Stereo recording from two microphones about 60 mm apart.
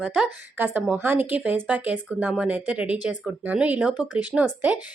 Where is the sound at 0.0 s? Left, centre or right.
Centre.